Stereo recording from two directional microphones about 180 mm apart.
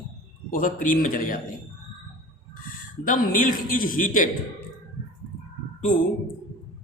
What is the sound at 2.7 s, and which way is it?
A man's voice, 50° left (ahead or behind).